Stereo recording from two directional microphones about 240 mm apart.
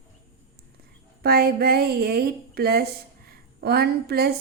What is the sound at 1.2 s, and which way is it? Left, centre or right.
A woman's voice, right.